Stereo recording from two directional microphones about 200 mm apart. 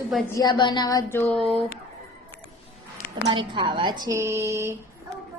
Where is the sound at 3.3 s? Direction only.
25° right (ahead or behind).